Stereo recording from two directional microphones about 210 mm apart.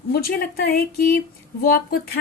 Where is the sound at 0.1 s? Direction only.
45° left (ahead or behind).